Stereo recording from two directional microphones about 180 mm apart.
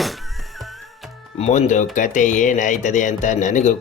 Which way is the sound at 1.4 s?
40° left (ahead or behind).